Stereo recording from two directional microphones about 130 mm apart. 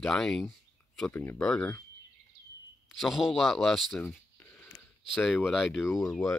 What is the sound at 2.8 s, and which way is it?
Speech, centre (ahead or behind).